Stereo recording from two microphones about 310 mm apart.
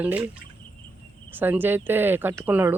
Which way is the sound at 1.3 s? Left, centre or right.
Centre.